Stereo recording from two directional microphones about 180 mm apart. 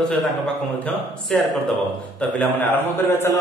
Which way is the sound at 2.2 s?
10° left (ahead or behind).